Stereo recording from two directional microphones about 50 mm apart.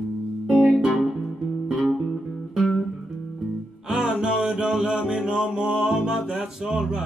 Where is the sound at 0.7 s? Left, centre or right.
Centre.